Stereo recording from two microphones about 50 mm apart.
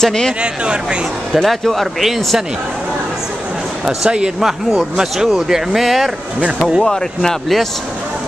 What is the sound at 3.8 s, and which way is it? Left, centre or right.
Speech, centre.